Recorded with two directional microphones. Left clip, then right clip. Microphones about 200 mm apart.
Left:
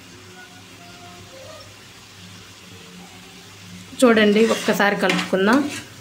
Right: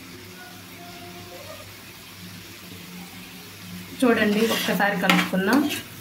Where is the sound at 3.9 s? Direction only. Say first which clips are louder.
Left 6 dB; 50° left (ahead or behind).